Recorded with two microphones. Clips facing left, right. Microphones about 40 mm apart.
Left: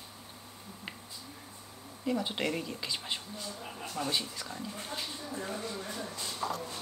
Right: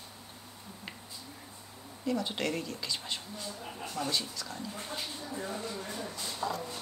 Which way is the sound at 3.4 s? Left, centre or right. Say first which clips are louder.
Even; centre.